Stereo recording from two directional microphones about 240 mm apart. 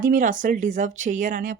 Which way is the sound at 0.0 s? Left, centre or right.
Right.